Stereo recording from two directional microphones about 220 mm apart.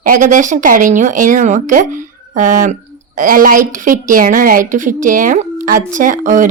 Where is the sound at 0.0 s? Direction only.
35° right (ahead or behind).